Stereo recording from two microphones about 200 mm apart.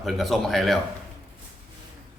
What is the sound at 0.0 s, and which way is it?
Speech, centre (ahead or behind).